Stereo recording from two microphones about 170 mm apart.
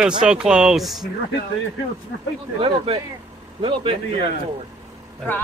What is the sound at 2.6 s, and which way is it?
Speech, 30° right (ahead or behind).